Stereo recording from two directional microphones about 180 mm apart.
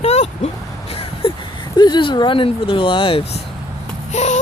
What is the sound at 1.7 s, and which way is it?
Speech, 25° left (ahead or behind).